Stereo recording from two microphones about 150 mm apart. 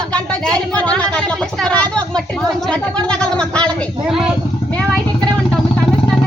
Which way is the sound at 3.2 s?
5° left (ahead or behind).